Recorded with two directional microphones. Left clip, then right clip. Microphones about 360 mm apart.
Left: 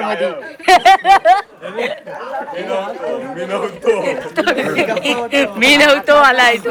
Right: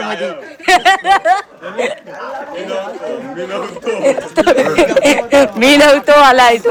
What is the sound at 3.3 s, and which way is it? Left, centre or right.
Speech, centre.